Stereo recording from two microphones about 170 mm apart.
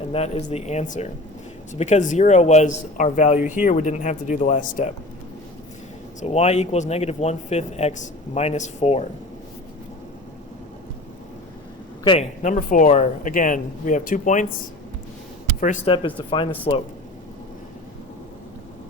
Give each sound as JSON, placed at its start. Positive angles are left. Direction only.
{"t": 0.1, "sound": "speech", "side_deg": 35}
{"t": 6.1, "sound": "speech", "side_deg": 40}
{"t": 12.4, "sound": "speech", "side_deg": 50}
{"t": 15.6, "sound": "speech", "side_deg": 45}
{"t": 15.9, "sound": "speech", "side_deg": 30}